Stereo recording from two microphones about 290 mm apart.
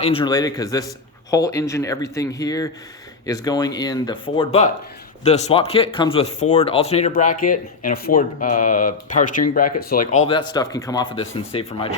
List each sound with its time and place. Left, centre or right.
0.0 s speech: centre